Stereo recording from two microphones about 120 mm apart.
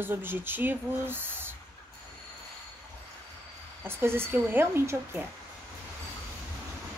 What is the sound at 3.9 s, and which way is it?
Speech, 20° right (ahead or behind).